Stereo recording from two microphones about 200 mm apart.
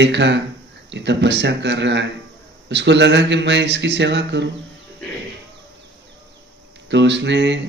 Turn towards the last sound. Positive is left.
turn(degrees=-60)  # may be behind; listen again after turning